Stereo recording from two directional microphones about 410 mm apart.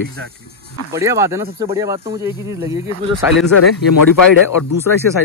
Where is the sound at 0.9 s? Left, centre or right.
Centre.